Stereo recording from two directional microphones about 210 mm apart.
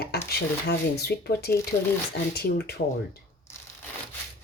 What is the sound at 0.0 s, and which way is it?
Speech, 50° left (ahead or behind).